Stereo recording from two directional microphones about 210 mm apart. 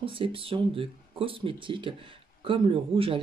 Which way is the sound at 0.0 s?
25° right (ahead or behind).